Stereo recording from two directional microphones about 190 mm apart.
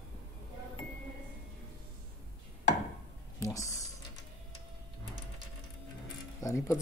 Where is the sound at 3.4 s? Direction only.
15° left (ahead or behind).